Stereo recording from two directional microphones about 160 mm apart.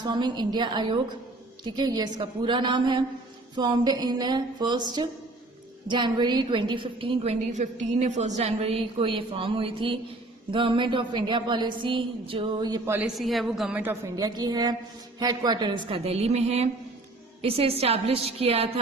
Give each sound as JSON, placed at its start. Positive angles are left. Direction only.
{"t": 0.0, "sound": "a woman's voice", "side_deg": -30}
{"t": 7.5, "sound": "a woman's voice", "side_deg": -50}
{"t": 13.1, "sound": "a woman's voice", "side_deg": 0}
{"t": 14.2, "sound": "a woman's voice", "side_deg": -25}